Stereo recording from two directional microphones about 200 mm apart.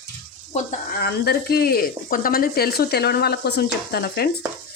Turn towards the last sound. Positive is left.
turn(degrees=50)  # may be behind; listen again after turning